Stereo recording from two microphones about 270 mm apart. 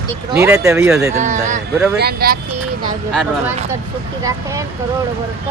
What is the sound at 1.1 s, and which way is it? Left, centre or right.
Speech, right.